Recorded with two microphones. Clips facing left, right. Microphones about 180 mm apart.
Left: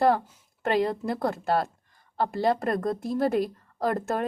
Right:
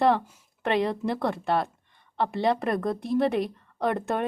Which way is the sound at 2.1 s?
Centre (ahead or behind).